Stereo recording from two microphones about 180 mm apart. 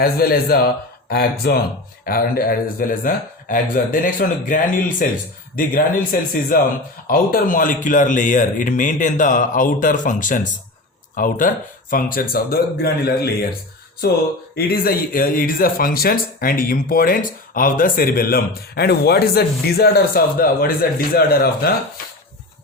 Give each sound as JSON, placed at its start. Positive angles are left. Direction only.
{"t": 0.0, "sound": "speech", "side_deg": 55}